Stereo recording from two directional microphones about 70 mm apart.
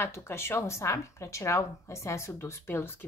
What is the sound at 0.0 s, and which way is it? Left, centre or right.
A woman's voice, left.